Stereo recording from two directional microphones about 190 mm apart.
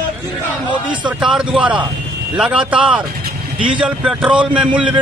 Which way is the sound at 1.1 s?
5° right (ahead or behind).